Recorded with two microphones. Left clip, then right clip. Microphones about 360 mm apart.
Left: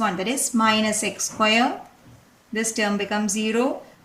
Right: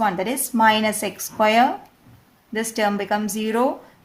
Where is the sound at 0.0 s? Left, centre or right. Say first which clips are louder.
Right 2 dB; centre.